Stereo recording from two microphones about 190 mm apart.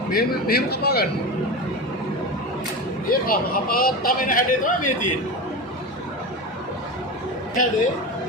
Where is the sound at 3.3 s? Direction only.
50° left (ahead or behind).